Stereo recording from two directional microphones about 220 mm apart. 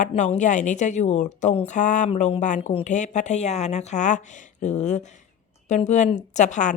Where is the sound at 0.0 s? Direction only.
30° left (ahead or behind).